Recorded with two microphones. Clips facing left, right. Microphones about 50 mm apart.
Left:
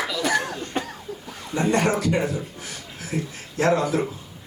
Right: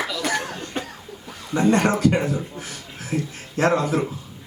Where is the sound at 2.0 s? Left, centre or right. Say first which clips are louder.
Right 3 dB; right.